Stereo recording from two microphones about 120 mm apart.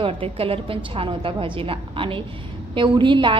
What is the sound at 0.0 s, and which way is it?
A woman's voice, 50° right (ahead or behind).